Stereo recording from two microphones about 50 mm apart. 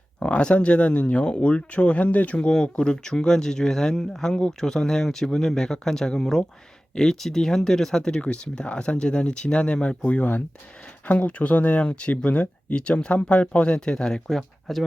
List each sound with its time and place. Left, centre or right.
0.2 s speech: left
2.5 s speech: centre
10.1 s speech: left; by 14.2 s centre
14.3 s speech: centre